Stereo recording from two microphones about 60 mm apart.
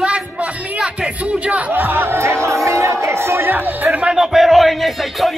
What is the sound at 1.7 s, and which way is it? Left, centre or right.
Speech, right.